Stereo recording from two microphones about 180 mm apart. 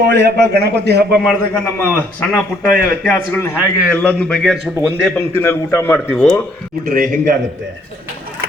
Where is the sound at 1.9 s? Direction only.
10° left (ahead or behind).